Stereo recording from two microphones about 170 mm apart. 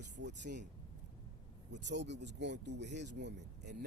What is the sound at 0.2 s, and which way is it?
Speech, 90° right.